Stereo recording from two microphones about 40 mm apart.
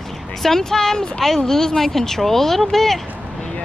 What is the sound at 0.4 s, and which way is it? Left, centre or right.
Speech, centre.